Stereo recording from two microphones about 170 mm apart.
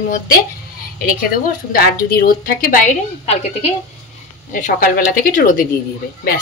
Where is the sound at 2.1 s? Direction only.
60° left (ahead or behind).